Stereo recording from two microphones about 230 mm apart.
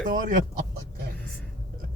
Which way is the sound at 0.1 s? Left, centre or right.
Right.